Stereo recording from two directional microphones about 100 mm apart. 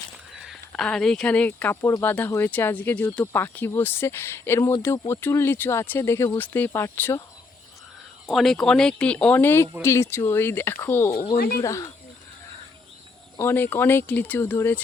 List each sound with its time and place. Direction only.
0.3 s a sound: 5° right (ahead or behind)
0.8 s speech: 5° left (ahead or behind); by 7.2 s 25° left (ahead or behind)
8.3 s speech: centre (ahead or behind); by 11.1 s 25° left (ahead or behind)
11.6 s speech: 35° left (ahead or behind)
13.3 s speech: 25° left (ahead or behind)